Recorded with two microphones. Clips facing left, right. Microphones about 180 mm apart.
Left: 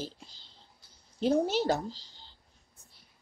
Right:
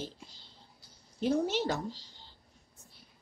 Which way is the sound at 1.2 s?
35° left (ahead or behind).